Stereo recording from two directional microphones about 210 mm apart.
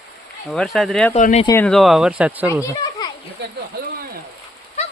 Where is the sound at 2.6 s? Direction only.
15° left (ahead or behind).